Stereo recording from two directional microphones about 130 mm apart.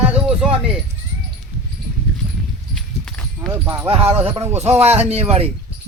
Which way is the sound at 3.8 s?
50° right (ahead or behind).